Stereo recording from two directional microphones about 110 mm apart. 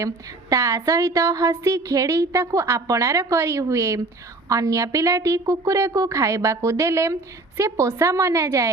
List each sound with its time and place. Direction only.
0.5 s a woman's voice: 25° right (ahead or behind)